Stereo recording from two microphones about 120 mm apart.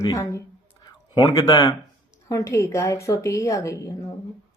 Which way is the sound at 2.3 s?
25° left (ahead or behind).